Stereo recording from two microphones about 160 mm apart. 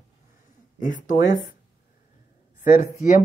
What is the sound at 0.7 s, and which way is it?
Speech, 50° left (ahead or behind).